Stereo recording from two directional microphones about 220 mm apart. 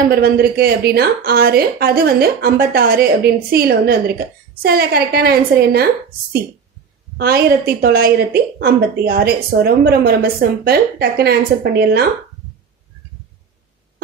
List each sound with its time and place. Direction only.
0.1 s speech: 45° right (ahead or behind)
7.2 s speech: 45° right (ahead or behind)